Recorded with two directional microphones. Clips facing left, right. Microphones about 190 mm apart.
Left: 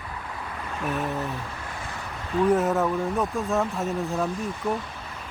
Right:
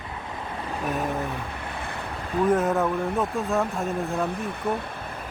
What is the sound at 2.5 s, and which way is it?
Speech, centre (ahead or behind).